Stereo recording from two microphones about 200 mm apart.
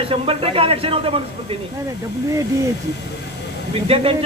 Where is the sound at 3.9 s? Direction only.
25° right (ahead or behind).